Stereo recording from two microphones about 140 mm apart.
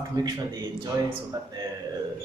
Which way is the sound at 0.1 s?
30° right (ahead or behind).